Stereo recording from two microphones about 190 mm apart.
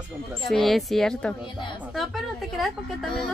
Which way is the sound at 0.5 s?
Centre (ahead or behind).